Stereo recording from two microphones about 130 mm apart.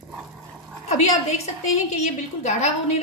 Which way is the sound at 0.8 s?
65° left (ahead or behind).